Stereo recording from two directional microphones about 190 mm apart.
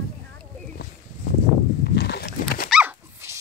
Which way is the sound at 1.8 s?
55° left (ahead or behind).